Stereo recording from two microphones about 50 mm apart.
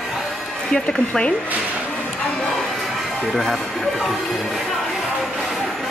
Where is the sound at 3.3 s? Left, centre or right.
Centre.